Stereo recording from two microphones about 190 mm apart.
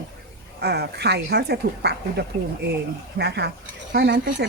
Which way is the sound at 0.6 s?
60° right (ahead or behind).